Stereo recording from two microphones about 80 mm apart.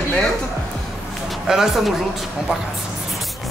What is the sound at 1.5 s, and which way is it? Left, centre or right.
Speech, centre.